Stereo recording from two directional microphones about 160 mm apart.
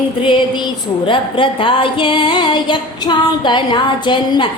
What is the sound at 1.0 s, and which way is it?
Music, 35° left (ahead or behind).